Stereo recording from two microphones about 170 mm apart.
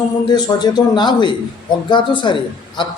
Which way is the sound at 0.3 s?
25° left (ahead or behind).